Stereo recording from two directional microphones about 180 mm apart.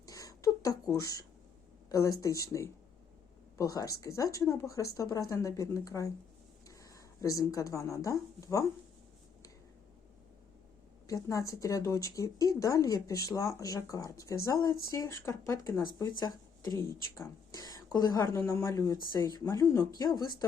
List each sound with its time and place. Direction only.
0.1 s a sound: 20° left (ahead or behind)
1.9 s speech: 20° left (ahead or behind)
11.0 s speech: 20° left (ahead or behind)